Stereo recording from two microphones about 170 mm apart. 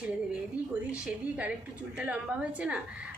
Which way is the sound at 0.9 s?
5° right (ahead or behind).